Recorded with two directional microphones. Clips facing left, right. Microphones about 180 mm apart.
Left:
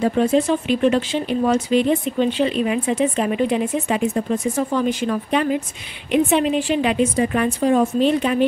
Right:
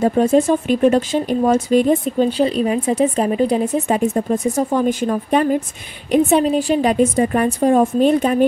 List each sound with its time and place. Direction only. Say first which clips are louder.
0.0 s a woman's voice: right 3 dB; 45° right (ahead or behind)